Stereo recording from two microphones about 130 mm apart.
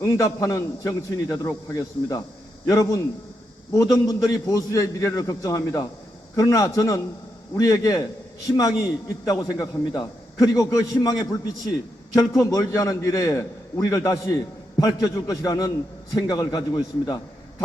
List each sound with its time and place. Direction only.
0.0 s a man's voice: 25° left (ahead or behind)